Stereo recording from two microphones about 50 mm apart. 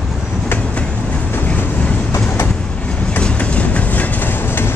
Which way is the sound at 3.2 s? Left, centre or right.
Left.